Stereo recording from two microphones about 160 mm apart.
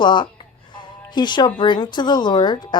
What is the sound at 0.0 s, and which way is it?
Speech, 30° left (ahead or behind).